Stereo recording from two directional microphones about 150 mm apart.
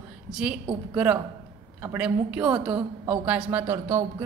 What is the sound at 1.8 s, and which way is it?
Speech, 10° right (ahead or behind).